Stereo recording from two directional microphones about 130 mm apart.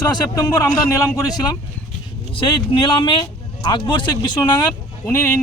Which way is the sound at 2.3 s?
40° left (ahead or behind).